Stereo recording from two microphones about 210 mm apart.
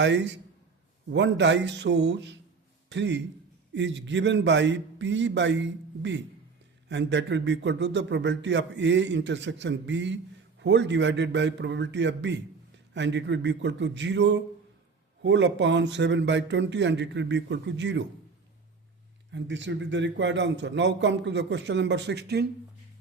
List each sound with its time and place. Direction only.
0.0 s speech: 55° right (ahead or behind)
19.3 s speech: 60° right (ahead or behind)